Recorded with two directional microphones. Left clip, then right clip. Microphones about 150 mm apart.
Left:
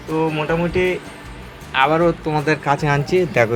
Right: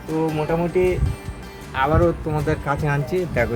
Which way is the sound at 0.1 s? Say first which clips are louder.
Left 3 dB; centre (ahead or behind).